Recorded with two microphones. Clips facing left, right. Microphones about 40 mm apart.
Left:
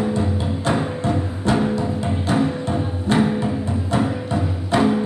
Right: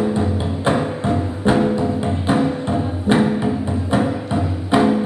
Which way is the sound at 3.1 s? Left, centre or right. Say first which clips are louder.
Right 2 dB; right.